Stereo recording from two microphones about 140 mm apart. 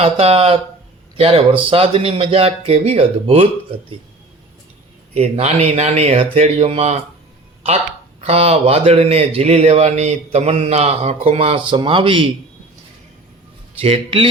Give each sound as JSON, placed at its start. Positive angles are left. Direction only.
{"t": 0.0, "sound": "a man's voice", "side_deg": -45}
{"t": 5.1, "sound": "a man's voice", "side_deg": -50}
{"t": 8.2, "sound": "a man's voice", "side_deg": -50}
{"t": 13.7, "sound": "speech", "side_deg": -45}